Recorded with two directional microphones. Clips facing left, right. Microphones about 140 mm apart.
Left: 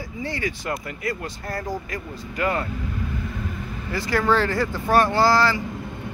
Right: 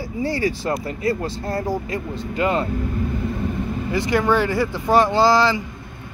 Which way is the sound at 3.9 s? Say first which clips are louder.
Right 2 dB; 20° right (ahead or behind).